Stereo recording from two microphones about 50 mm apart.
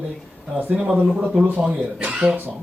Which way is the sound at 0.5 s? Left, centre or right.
Right.